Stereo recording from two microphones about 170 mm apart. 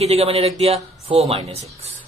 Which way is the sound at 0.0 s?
35° right (ahead or behind).